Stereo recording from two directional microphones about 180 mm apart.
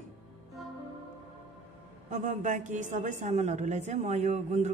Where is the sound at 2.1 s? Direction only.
45° right (ahead or behind).